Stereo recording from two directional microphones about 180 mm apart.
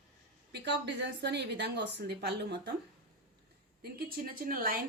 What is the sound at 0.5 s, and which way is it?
A woman's voice, 75° right (ahead or behind).